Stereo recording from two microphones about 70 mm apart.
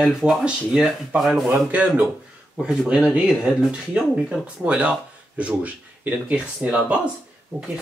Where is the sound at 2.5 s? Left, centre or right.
Centre.